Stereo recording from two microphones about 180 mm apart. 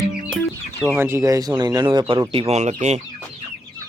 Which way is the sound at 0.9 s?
15° right (ahead or behind).